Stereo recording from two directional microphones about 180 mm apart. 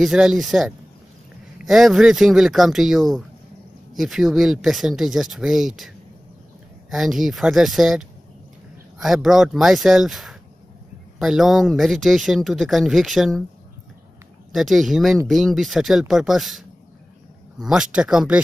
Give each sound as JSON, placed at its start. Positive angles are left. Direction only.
{"t": 0.0, "sound": "speech", "side_deg": -5}
{"t": 6.9, "sound": "speech", "side_deg": 0}
{"t": 14.5, "sound": "speech", "side_deg": 0}